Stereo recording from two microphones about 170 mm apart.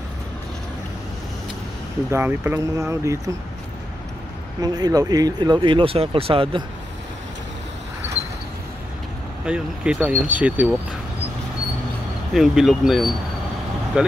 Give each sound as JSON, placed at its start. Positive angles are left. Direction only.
{"t": 2.0, "sound": "speech", "side_deg": -15}
{"t": 4.6, "sound": "speech", "side_deg": -25}
{"t": 9.5, "sound": "speech", "side_deg": -5}
{"t": 12.4, "sound": "speech", "side_deg": -5}